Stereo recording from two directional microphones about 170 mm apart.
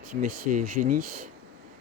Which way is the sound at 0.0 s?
55° right (ahead or behind).